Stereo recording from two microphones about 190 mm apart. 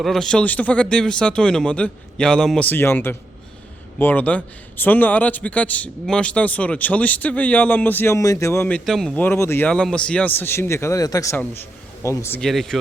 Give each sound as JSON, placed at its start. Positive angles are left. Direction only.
{"t": 0.0, "sound": "a man's voice", "side_deg": 0}
{"t": 12.4, "sound": "speech", "side_deg": 0}